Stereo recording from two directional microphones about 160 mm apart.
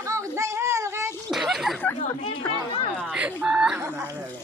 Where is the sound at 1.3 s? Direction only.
Centre (ahead or behind).